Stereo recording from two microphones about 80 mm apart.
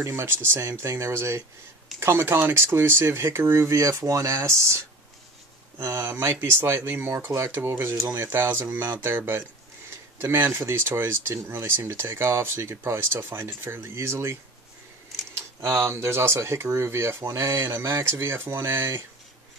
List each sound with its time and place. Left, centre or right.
0.0 s speech: right
15.3 s speech: right